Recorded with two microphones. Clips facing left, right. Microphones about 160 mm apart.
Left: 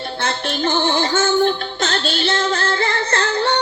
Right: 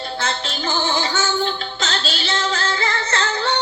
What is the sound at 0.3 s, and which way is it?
Music, 55° left (ahead or behind).